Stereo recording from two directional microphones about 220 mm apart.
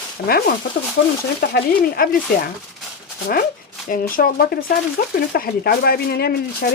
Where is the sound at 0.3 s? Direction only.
45° left (ahead or behind).